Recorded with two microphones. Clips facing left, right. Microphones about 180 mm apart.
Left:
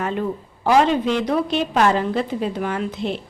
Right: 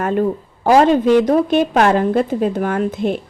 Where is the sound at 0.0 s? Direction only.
45° right (ahead or behind).